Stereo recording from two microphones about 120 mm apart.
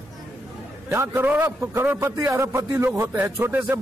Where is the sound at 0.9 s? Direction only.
20° right (ahead or behind).